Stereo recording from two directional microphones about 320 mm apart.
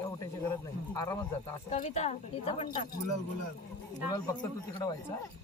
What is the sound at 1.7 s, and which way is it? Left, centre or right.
Speech, left.